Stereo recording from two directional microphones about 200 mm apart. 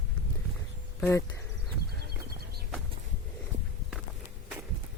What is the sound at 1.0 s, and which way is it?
Speech, 10° left (ahead or behind).